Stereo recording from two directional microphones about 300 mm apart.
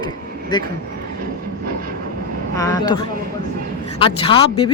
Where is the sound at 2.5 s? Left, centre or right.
Centre.